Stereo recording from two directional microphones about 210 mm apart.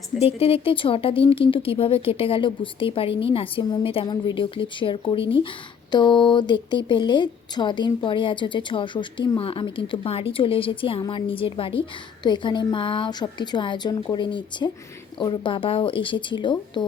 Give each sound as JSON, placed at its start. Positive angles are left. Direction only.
{"t": 0.2, "sound": "speech", "side_deg": 25}